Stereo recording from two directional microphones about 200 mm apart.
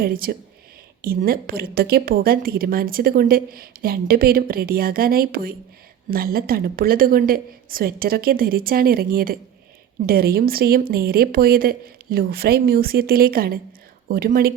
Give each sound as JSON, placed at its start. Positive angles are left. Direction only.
{"t": 0.0, "sound": "a woman's voice", "side_deg": -45}